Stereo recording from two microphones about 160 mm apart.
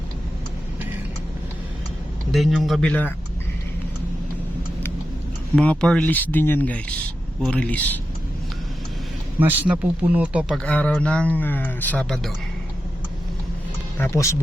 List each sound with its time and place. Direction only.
2.3 s speech: centre (ahead or behind)
5.5 s speech: 5° left (ahead or behind)
9.4 s speech: 10° right (ahead or behind)
10.6 s speech: 10° left (ahead or behind)
14.0 s speech: 20° left (ahead or behind)